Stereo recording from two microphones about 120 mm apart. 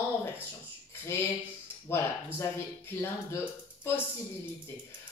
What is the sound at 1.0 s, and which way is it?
Speech, 20° left (ahead or behind).